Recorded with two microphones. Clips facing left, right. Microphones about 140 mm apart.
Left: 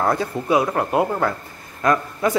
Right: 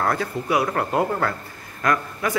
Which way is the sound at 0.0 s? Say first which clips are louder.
Left 3 dB; 20° left (ahead or behind).